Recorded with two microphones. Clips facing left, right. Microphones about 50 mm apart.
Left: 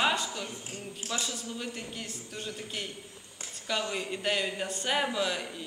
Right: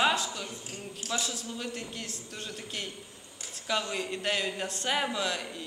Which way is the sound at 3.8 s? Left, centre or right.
Centre.